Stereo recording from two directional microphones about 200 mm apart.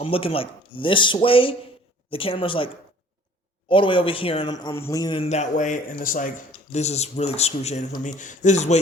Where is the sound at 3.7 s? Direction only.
25° left (ahead or behind).